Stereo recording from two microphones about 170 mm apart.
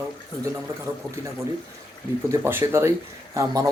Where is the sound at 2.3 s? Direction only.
15° right (ahead or behind).